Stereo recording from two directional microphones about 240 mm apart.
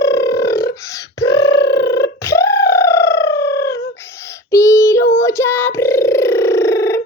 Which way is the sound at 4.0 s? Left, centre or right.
Centre.